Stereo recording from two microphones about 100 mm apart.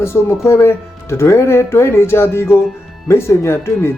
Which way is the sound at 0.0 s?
25° left (ahead or behind).